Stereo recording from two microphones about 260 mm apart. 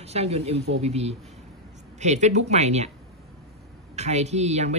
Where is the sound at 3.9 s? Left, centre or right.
Right.